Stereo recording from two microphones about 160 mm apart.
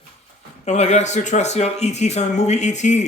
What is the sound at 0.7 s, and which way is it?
Speech, 45° left (ahead or behind).